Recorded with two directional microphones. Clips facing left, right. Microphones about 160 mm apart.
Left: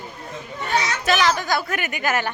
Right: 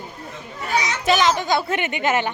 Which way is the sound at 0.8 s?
20° right (ahead or behind).